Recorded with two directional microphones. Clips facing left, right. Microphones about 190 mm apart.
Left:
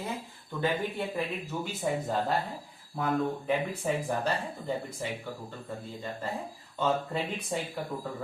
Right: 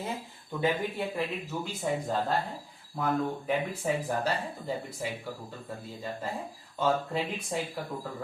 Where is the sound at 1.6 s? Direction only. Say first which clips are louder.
Left 1 dB; 5° left (ahead or behind).